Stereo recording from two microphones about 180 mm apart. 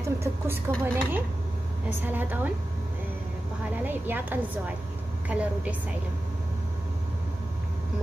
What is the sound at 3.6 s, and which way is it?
A woman's voice, 10° right (ahead or behind).